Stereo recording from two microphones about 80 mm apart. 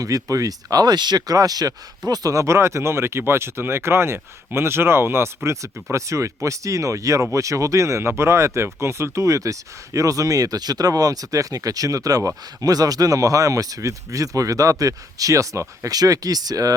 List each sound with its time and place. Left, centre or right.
0.0 s speech: right